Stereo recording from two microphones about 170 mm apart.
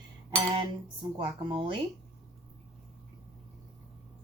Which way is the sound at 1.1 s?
30° right (ahead or behind).